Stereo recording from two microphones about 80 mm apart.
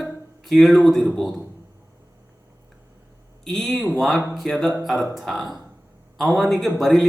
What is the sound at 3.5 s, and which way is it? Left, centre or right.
Speech, centre.